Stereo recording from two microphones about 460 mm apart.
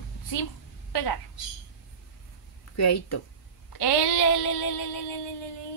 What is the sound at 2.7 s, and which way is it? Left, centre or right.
Speech, left.